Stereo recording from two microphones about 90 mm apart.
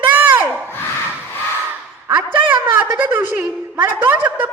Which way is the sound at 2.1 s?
20° right (ahead or behind).